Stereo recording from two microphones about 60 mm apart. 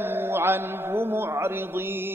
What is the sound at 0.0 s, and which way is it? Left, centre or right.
Mantra, right.